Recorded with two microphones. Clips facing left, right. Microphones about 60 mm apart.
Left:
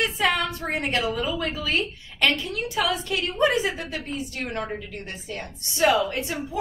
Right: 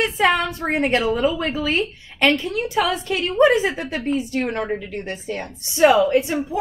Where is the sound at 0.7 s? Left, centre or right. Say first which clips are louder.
Right 7 dB; right.